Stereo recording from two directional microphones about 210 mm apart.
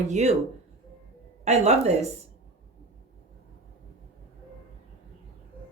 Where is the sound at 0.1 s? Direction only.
35° right (ahead or behind).